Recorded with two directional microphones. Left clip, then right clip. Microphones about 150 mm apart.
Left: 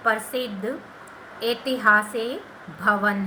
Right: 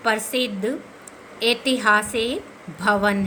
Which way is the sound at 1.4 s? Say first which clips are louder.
Right 2 dB; 70° right (ahead or behind).